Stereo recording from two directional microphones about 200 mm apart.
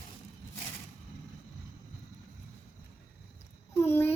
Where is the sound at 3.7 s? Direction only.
10° left (ahead or behind).